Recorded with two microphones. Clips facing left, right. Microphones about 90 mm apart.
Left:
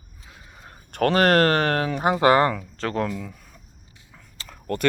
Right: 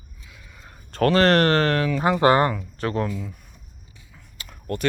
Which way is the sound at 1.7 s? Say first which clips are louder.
Right 1 dB; 35° left (ahead or behind).